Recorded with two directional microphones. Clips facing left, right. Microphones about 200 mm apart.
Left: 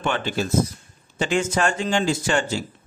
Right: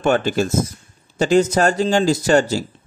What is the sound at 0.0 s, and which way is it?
A man's voice, 45° right (ahead or behind).